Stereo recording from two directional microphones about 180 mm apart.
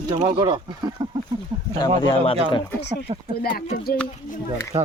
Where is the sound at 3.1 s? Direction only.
30° right (ahead or behind).